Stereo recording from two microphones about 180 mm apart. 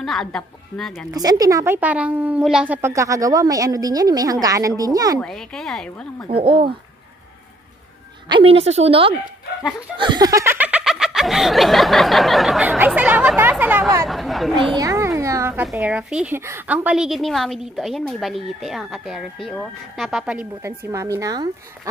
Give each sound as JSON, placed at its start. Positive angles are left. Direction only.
{"t": 0.0, "sound": "a woman's voice", "side_deg": 0}
{"t": 1.1, "sound": "a woman's voice", "side_deg": -20}
{"t": 5.2, "sound": "a woman's voice", "side_deg": 5}
{"t": 6.4, "sound": "a woman's voice", "side_deg": -30}
{"t": 8.3, "sound": "a woman's voice", "side_deg": -30}
{"t": 9.9, "sound": "snicker", "side_deg": -25}
{"t": 14.0, "sound": "chatter", "side_deg": 0}
{"t": 14.8, "sound": "speech", "side_deg": -15}